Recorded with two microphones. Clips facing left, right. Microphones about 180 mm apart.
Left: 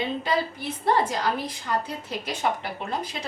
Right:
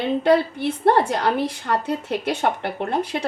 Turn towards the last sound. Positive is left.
turn(degrees=-60)  # may be behind; listen again after turning